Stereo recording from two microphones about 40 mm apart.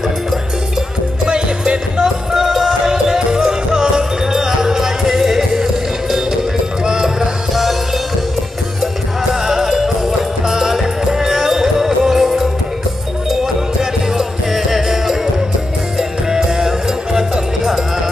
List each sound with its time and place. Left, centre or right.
1.2 s music: right
2.3 s music: centre
9.3 s music: centre